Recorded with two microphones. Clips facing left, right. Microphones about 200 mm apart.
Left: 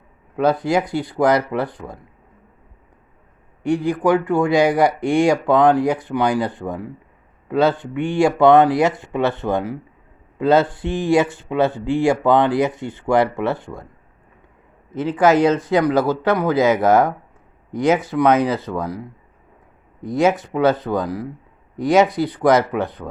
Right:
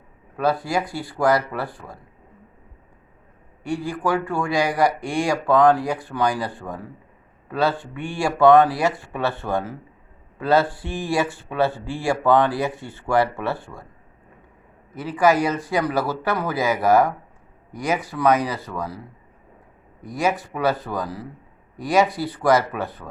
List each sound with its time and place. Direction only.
0.3 s speech: 20° left (ahead or behind)
3.6 s speech: 20° left (ahead or behind)
14.9 s speech: 20° left (ahead or behind)